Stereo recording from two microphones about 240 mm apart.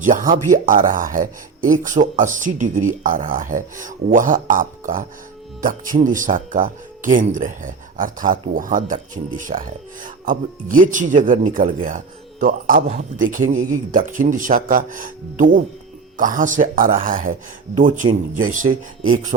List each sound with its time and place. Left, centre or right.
0.0 s speech: right